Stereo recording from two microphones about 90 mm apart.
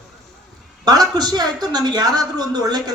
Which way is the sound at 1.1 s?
50° right (ahead or behind).